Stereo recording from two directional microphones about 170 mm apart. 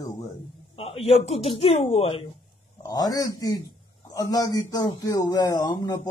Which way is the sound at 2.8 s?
20° left (ahead or behind).